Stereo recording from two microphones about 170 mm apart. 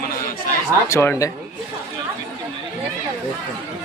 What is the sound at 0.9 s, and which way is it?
Speech, 15° left (ahead or behind).